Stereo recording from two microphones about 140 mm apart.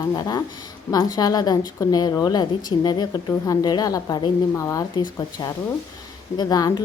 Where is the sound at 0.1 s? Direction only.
30° left (ahead or behind).